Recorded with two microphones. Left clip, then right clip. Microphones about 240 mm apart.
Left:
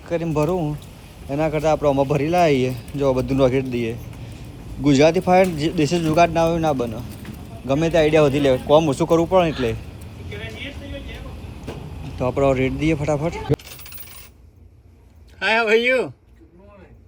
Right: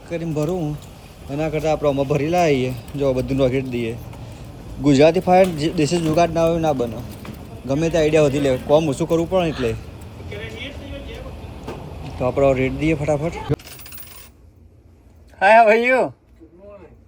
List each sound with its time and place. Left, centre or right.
1.3 s speech: centre
2.5 s speech: left
2.7 s speech: centre
10.2 s vehicle: centre
12.2 s speech: centre
15.4 s speech: centre